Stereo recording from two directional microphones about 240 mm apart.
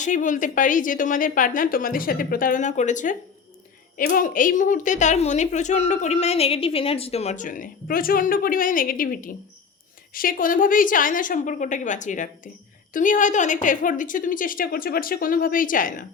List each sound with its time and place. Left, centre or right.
0.0 s a woman's voice: left